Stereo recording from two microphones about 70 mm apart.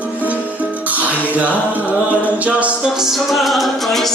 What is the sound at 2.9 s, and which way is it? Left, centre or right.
Music, centre.